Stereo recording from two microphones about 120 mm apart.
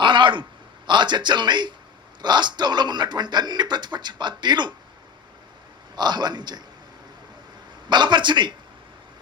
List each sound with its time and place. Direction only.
0.0 s a sound: 40° right (ahead or behind)
0.9 s speech: 40° right (ahead or behind)
6.0 s speech: 35° right (ahead or behind)
7.9 s speech: 40° right (ahead or behind)